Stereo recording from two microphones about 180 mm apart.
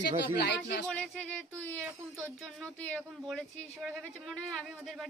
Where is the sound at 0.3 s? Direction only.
70° left (ahead or behind).